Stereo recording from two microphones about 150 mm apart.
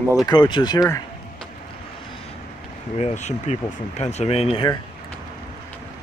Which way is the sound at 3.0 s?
50° left (ahead or behind).